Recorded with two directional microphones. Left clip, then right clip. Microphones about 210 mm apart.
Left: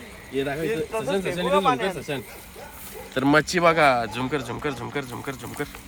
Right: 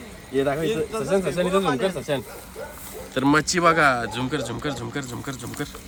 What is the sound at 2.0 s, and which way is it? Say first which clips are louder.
A man's voice: right 4 dB; centre (ahead or behind).